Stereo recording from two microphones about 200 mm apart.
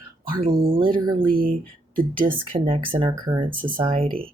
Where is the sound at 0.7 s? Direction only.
25° right (ahead or behind).